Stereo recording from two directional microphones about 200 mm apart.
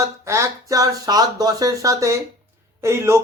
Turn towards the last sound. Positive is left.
turn(degrees=-15)  # may be behind; listen again after turning